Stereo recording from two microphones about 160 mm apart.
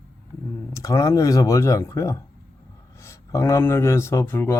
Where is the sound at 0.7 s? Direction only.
20° left (ahead or behind).